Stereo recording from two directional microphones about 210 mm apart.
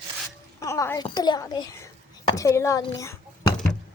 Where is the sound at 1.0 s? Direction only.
20° left (ahead or behind).